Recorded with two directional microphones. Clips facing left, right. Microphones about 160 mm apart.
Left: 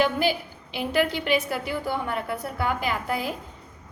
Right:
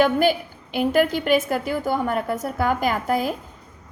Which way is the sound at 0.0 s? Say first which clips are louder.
Right 5 dB; 50° right (ahead or behind).